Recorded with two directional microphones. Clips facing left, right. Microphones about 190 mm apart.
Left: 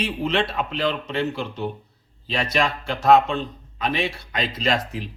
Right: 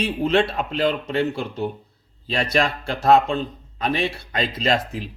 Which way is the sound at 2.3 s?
35° right (ahead or behind).